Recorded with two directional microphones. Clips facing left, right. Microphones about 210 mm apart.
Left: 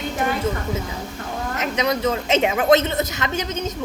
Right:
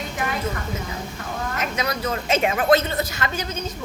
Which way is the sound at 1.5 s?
20° left (ahead or behind).